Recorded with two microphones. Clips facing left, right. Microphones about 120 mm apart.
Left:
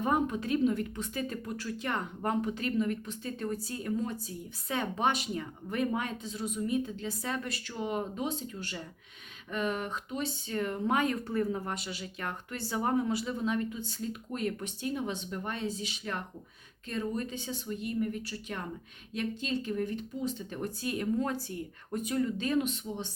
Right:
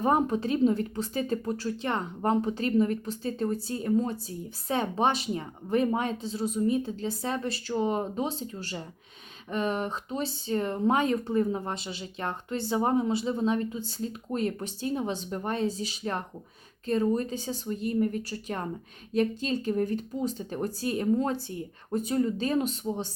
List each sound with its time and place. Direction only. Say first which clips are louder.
0.0 s a woman's voice: right 4 dB; 35° right (ahead or behind)